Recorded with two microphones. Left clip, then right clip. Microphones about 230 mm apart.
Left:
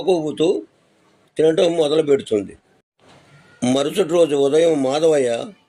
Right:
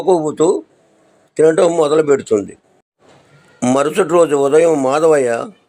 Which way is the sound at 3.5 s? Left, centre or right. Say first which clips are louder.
Right 4 dB; centre.